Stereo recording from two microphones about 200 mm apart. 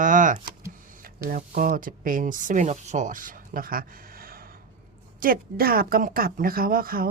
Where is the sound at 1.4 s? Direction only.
40° right (ahead or behind).